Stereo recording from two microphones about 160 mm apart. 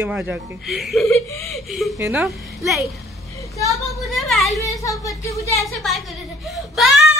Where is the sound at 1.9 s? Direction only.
15° right (ahead or behind).